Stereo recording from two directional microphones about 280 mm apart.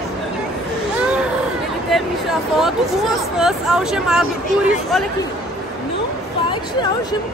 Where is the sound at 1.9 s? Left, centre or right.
Centre.